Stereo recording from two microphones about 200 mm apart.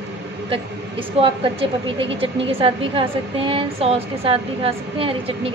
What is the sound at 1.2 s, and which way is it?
A woman's voice, 25° right (ahead or behind).